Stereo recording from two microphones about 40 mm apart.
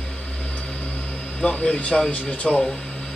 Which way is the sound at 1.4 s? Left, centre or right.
Left.